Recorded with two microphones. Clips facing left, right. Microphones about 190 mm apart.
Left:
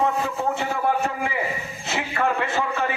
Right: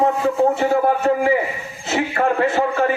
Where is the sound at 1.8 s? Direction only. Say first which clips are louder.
Right 5 dB; 40° right (ahead or behind).